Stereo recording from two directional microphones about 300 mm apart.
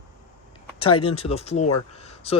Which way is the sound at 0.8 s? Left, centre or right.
Centre.